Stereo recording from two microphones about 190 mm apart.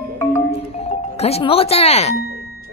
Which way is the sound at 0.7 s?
35° left (ahead or behind).